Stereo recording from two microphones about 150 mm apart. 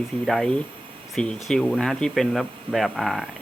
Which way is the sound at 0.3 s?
5° left (ahead or behind).